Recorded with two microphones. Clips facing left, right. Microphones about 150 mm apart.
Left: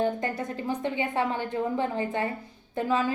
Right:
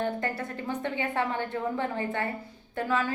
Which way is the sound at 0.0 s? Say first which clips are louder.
Left 3 dB; 15° left (ahead or behind).